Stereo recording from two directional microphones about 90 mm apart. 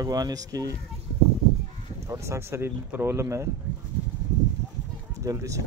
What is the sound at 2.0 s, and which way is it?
Speech, 30° right (ahead or behind).